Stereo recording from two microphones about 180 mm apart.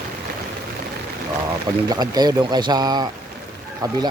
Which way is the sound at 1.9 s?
20° right (ahead or behind).